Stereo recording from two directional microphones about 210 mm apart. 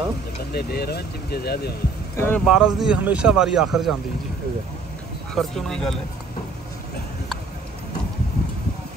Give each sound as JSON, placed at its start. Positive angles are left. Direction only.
{"t": 0.5, "sound": "speech", "side_deg": 50}
{"t": 2.1, "sound": "speech", "side_deg": 10}
{"t": 2.4, "sound": "speech", "side_deg": 0}
{"t": 5.3, "sound": "speech", "side_deg": 0}